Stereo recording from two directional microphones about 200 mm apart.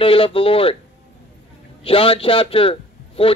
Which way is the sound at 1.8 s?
25° left (ahead or behind).